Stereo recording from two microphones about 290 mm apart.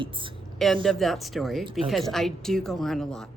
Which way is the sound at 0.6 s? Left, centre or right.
Centre.